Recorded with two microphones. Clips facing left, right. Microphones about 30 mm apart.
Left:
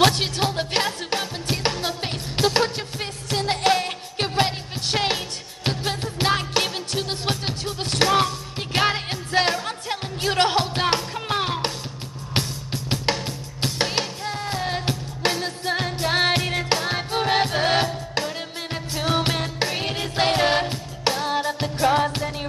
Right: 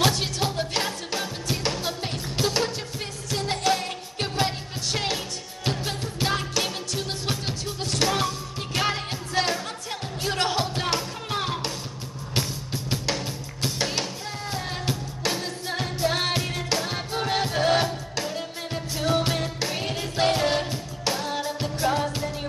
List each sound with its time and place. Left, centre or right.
0.0 s music: left
12.4 s music: left